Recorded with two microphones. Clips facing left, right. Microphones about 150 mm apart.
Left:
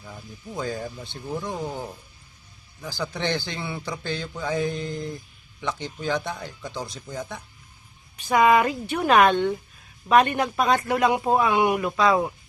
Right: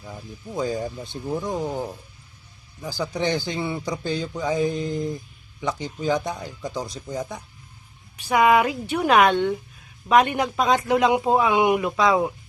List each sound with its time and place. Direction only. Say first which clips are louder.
0.0 s a woman's voice: right 3 dB; 10° right (ahead or behind)
4.0 s a woman's voice: right 4 dB; 5° right (ahead or behind)